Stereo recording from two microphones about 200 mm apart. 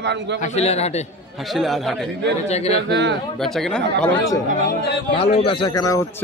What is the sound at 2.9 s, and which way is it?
Speech, 60° right (ahead or behind).